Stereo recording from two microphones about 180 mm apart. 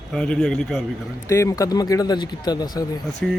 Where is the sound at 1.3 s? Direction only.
15° left (ahead or behind).